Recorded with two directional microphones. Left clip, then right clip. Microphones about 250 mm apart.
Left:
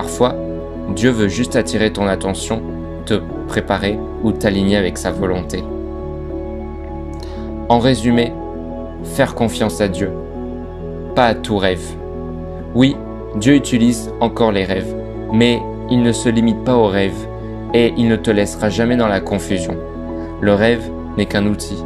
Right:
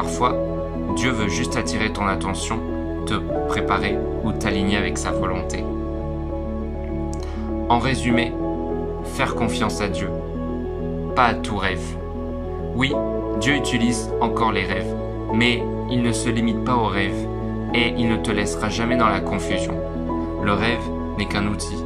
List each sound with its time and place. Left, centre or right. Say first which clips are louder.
0.9 s speech: left 7 dB; centre
3.1 s speech: left 3 dB; centre
7.6 s speech: left 6 dB; centre
11.1 s speech: left 5 dB; centre
13.4 s speech: left 8 dB; centre